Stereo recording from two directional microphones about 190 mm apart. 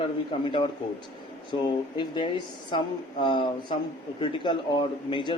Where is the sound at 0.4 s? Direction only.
25° left (ahead or behind).